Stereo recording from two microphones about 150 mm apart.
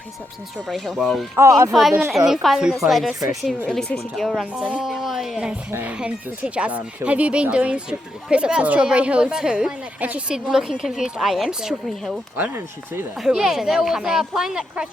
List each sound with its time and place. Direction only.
0.7 s a woman's voice: centre (ahead or behind)
1.4 s speech: 20° right (ahead or behind)
1.7 s a woman's voice: centre (ahead or behind)
12.4 s a woman's voice: 15° right (ahead or behind)
13.1 s a woman's voice: 5° right (ahead or behind)